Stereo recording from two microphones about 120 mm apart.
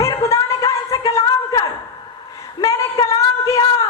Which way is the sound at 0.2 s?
25° left (ahead or behind).